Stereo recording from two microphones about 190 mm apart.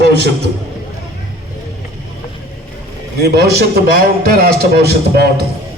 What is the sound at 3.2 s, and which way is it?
A man's voice, 60° right (ahead or behind).